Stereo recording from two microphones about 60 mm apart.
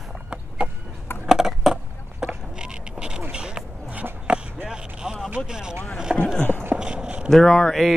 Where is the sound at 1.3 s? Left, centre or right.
Centre.